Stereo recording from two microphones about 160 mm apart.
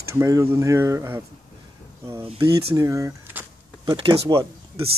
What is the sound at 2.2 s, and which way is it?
Speech, 30° right (ahead or behind).